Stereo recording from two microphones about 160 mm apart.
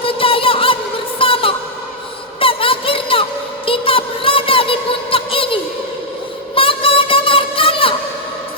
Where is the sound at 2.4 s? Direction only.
35° left (ahead or behind).